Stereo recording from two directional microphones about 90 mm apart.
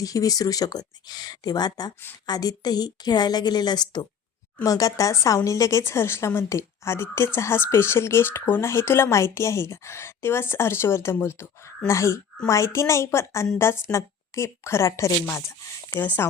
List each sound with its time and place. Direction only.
0.0 s speech: 40° left (ahead or behind)
4.6 s a woman's voice: 40° left (ahead or behind)
16.0 s speech: 20° left (ahead or behind)